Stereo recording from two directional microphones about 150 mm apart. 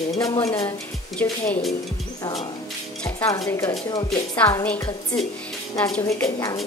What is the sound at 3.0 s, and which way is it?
Speech, 25° left (ahead or behind).